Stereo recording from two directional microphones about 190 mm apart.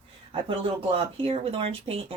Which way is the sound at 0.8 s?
30° right (ahead or behind).